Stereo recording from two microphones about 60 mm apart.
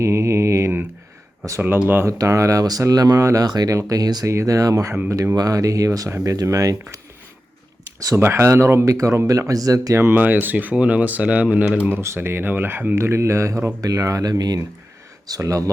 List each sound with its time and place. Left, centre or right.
0.0 s mantra: right
2.0 s speech: right
4.3 s speech: right
5.0 s speech: right
5.4 s speech: right
7.9 s speech: right
8.2 s speech: right
9.5 s speech: right
10.2 s speech: right
11.9 s speech: right
13.0 s speech: right
13.8 s speech: right
15.4 s speech: right